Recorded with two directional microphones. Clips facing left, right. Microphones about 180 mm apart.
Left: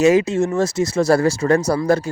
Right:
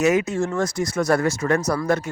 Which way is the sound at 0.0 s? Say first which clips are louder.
Left 5 dB; 30° left (ahead or behind).